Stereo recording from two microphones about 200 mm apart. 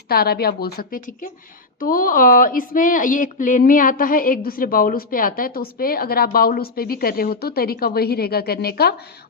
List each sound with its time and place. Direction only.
0.1 s speech: 50° left (ahead or behind)